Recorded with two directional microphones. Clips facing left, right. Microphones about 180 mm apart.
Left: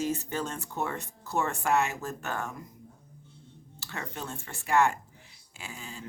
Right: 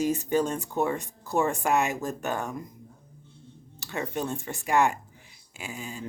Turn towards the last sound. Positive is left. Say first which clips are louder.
# right 6 dB
turn(degrees=-15)  # may be behind; listen again after turning